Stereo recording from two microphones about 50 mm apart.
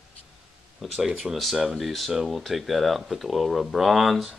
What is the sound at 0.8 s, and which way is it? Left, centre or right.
Speech, centre.